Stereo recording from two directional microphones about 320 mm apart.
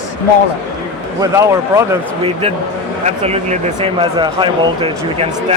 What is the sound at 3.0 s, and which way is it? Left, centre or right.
Speech, centre.